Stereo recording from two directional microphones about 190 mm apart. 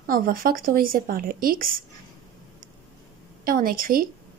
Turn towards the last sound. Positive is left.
turn(degrees=-50)  # may be behind; listen again after turning